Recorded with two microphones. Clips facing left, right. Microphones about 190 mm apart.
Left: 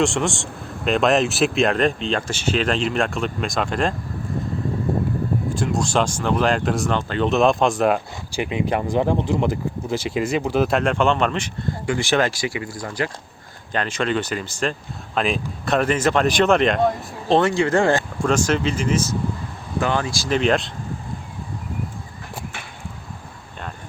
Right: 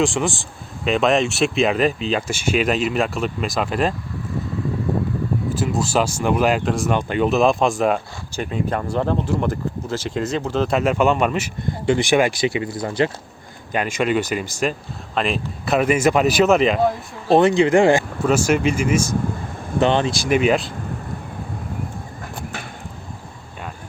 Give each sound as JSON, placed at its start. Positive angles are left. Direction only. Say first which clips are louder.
{"t": 0.0, "sound": "speech", "louder": "even", "side_deg": 0}
{"t": 5.5, "sound": "speech", "louder": "right 2 dB", "side_deg": -5}
{"t": 6.9, "sound": "speech", "louder": "right 2 dB", "side_deg": -10}
{"t": 7.3, "sound": "speech", "louder": "even", "side_deg": 0}
{"t": 8.7, "sound": "speech", "louder": "left 2 dB", "side_deg": 15}
{"t": 10.7, "sound": "speech", "louder": "right 1 dB", "side_deg": -5}
{"t": 13.7, "sound": "speech", "louder": "right 3 dB", "side_deg": -10}
{"t": 17.4, "sound": "speech", "louder": "right 4 dB", "side_deg": -20}
{"t": 19.8, "sound": "speech", "louder": "right 5 dB", "side_deg": -25}